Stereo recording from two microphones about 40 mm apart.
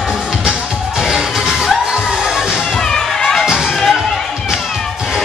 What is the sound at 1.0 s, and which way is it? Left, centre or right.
Music, centre.